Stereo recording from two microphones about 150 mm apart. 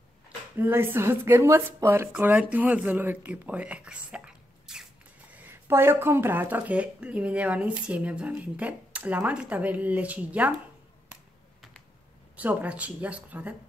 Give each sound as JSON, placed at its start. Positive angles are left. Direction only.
{"t": 0.6, "sound": "speech", "side_deg": -15}
{"t": 12.4, "sound": "speech", "side_deg": -10}